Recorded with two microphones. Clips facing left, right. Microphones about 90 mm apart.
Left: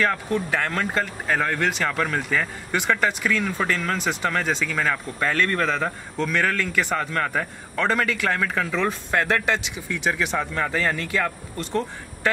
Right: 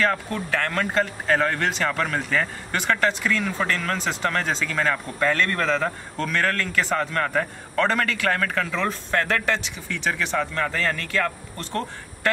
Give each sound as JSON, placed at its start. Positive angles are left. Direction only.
{"t": 0.3, "sound": "a man's voice", "side_deg": 15}
{"t": 7.0, "sound": "a man's voice", "side_deg": 0}